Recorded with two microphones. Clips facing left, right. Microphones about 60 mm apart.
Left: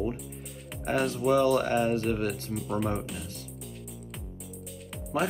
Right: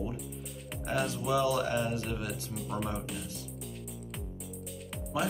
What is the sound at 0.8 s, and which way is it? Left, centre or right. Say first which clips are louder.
Speech: left 6 dB; left.